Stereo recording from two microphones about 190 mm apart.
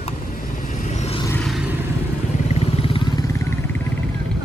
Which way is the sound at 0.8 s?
35° left (ahead or behind).